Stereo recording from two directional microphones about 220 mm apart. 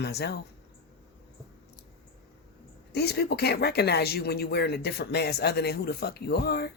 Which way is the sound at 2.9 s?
45° left (ahead or behind).